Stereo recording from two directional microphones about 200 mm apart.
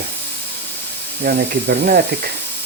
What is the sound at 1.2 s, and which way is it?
Speech, 55° right (ahead or behind).